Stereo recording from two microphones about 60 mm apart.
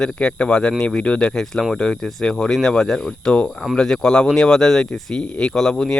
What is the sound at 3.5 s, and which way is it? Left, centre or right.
Speech, centre.